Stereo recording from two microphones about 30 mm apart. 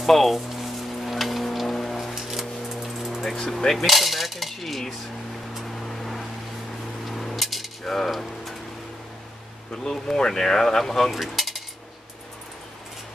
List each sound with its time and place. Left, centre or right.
0.0 s speech: centre
0.6 s music: centre
2.1 s a sound: centre
3.4 s cutlery: centre
3.7 s cutlery: centre
5.9 s vehicle: centre
7.1 s a sound: centre
8.1 s speech: centre
9.8 s speech: left
11.1 s mechanisms: centre